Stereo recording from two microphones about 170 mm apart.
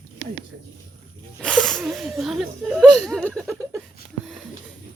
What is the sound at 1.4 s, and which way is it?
Sneeze, 5° left (ahead or behind).